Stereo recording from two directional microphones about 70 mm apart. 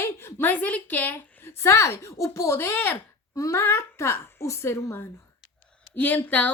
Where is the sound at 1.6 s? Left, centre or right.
Left.